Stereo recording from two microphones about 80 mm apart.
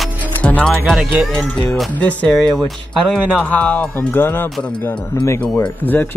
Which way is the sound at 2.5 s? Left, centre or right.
Centre.